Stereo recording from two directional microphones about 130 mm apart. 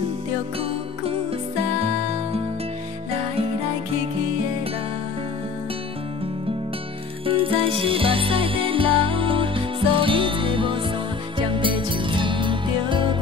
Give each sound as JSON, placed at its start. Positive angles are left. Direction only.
{"t": 7.2, "sound": "music", "side_deg": -45}